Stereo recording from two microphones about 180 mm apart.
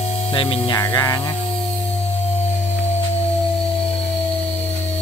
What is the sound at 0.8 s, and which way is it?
Speech, 15° left (ahead or behind).